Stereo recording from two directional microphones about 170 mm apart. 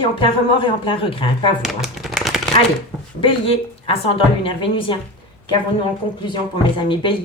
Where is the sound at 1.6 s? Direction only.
Centre (ahead or behind).